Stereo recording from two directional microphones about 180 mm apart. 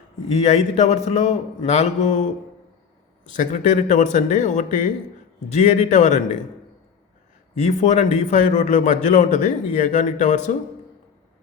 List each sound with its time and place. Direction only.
0.3 s a man's voice: 40° left (ahead or behind)
3.3 s a man's voice: 45° left (ahead or behind)
7.6 s a man's voice: 40° left (ahead or behind)